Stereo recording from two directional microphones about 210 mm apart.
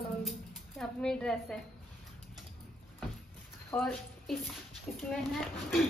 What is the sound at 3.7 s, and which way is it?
A woman's voice, centre (ahead or behind).